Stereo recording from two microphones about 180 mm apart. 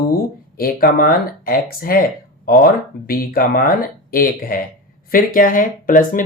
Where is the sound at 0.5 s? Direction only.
55° left (ahead or behind).